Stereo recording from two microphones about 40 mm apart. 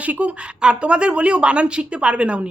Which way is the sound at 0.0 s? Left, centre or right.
Right.